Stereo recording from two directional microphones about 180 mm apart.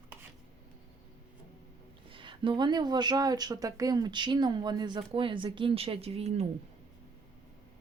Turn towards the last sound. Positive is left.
turn(degrees=-35)  # may be behind; listen again after turning